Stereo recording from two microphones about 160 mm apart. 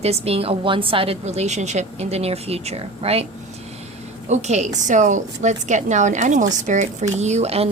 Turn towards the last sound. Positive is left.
turn(degrees=-40)  # may be behind; listen again after turning